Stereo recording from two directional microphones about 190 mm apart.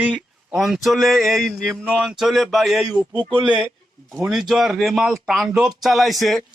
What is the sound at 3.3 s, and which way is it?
Speech, 25° right (ahead or behind).